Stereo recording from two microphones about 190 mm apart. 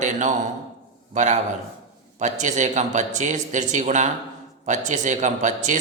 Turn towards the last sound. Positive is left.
turn(degrees=-40)  # may be behind; listen again after turning